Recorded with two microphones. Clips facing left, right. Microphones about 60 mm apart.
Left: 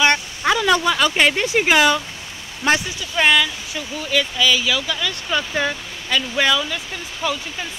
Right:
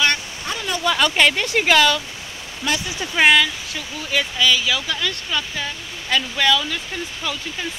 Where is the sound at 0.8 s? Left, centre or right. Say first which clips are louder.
Even; centre.